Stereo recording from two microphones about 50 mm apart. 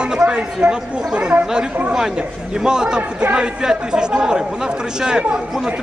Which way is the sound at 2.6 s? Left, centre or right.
Centre.